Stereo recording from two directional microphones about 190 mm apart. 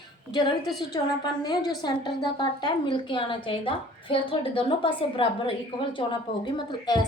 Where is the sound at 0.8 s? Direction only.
20° left (ahead or behind).